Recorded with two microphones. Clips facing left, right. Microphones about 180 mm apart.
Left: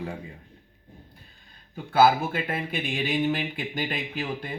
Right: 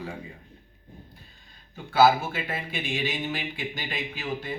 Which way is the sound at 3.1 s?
55° left (ahead or behind).